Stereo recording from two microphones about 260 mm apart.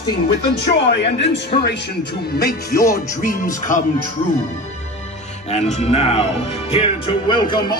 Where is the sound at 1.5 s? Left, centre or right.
Left.